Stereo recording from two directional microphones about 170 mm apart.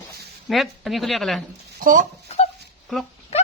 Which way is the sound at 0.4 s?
Centre (ahead or behind).